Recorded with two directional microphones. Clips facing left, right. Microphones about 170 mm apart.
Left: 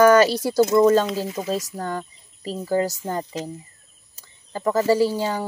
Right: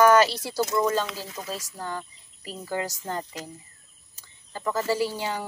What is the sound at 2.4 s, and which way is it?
Speech, 40° left (ahead or behind).